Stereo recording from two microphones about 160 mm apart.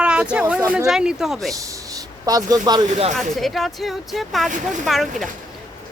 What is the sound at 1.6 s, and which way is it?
Speech, 20° right (ahead or behind).